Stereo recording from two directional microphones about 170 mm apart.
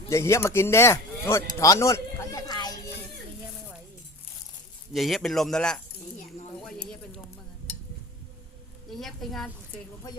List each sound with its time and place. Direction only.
0.1 s speech: 15° left (ahead or behind)
4.9 s speech: centre (ahead or behind)
6.6 s a sound: centre (ahead or behind)
8.9 s a woman's voice: centre (ahead or behind)